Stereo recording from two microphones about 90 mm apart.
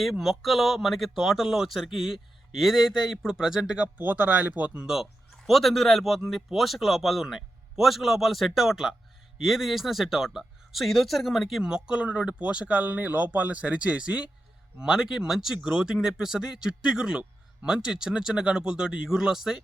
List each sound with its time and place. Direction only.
0.0 s speech: centre (ahead or behind)
3.9 s speech: 20° right (ahead or behind)
4.9 s a man's voice: centre (ahead or behind)